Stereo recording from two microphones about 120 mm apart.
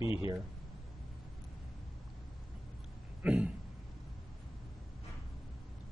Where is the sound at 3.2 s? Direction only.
5° right (ahead or behind).